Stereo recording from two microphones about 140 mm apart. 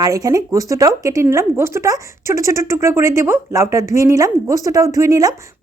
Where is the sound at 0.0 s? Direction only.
25° right (ahead or behind).